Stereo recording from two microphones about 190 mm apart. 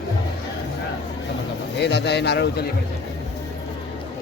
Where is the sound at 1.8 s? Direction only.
60° left (ahead or behind).